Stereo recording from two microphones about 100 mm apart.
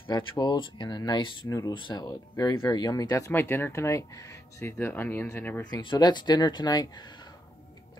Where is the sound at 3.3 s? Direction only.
20° left (ahead or behind).